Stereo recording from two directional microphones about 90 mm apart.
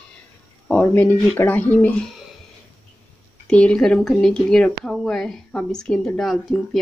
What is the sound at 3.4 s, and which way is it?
Speech, 10° left (ahead or behind).